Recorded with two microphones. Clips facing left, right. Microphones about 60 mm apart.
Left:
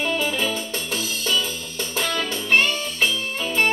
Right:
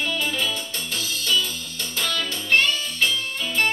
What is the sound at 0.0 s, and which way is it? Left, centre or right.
Music, left.